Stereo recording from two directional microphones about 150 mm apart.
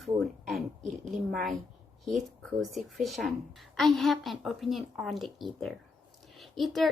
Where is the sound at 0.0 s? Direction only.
Centre (ahead or behind).